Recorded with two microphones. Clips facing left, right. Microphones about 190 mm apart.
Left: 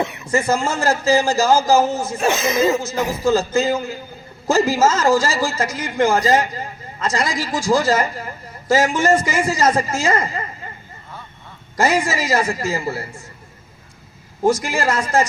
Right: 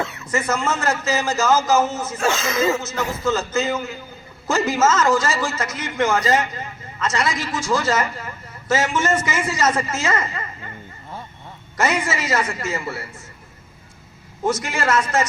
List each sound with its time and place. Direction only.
0.0 s a sound: 15° left (ahead or behind)
0.3 s a man's voice: 30° left (ahead or behind)
2.1 s speech: 20° left (ahead or behind)
2.8 s a man's voice: 30° left (ahead or behind)
11.8 s a man's voice: 30° left (ahead or behind)
14.4 s a man's voice: 30° left (ahead or behind)